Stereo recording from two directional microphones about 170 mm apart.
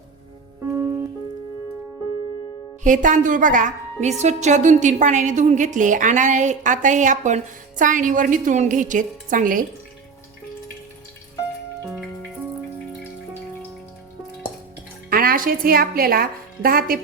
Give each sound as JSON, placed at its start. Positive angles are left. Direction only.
{"t": 2.8, "sound": "a woman's voice", "side_deg": -50}
{"t": 11.9, "sound": "music", "side_deg": 0}
{"t": 15.1, "sound": "a woman's voice", "side_deg": -60}